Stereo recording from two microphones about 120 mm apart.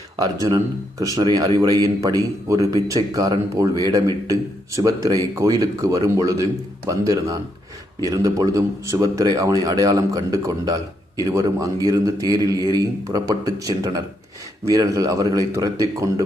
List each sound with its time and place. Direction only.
0.4 s a man's voice: 30° right (ahead or behind)